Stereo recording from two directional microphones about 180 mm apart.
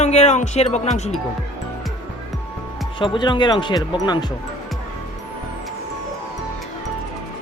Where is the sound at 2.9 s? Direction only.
25° left (ahead or behind).